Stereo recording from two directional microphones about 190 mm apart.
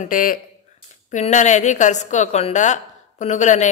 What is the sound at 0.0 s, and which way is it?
Speech, 45° left (ahead or behind).